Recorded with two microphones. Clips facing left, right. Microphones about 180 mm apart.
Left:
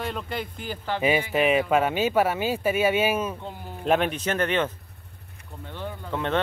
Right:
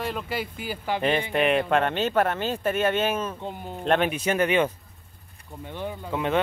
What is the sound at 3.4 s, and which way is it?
Speech, 20° right (ahead or behind).